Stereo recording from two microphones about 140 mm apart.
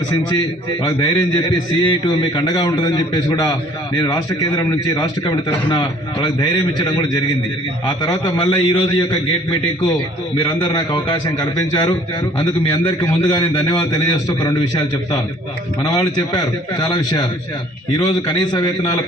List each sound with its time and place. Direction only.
0.8 s a man's voice: 30° left (ahead or behind)
8.4 s a man's voice: 35° left (ahead or behind)